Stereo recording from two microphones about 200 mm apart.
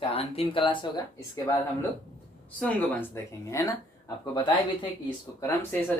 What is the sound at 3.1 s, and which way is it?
Speech, 15° left (ahead or behind).